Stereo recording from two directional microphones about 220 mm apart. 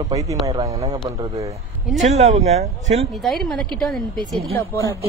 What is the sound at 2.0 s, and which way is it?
Speech, 30° right (ahead or behind).